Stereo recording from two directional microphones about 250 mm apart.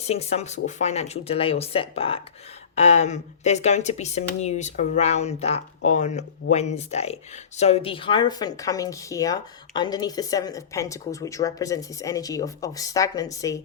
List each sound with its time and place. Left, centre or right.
0.0 s speech: left